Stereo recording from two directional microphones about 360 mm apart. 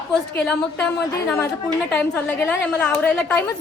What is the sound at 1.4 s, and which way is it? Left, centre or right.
A woman's voice, centre.